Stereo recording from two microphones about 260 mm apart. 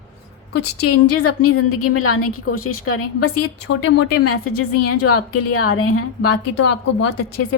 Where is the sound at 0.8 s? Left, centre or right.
Left.